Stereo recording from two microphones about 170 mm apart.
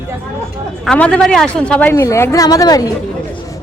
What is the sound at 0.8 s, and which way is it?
A woman's voice, 5° left (ahead or behind).